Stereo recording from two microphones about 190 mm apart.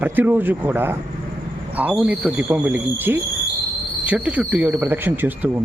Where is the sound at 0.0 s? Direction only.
10° right (ahead or behind).